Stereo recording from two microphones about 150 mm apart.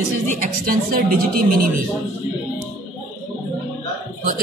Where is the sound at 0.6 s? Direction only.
75° right (ahead or behind).